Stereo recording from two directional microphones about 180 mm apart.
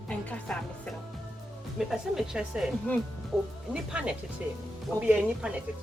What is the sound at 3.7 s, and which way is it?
A woman's voice, 5° right (ahead or behind).